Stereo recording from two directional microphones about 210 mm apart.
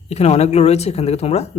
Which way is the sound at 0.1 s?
30° left (ahead or behind).